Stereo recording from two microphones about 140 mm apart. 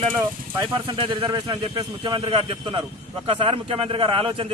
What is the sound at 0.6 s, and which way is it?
A man's voice, 40° right (ahead or behind).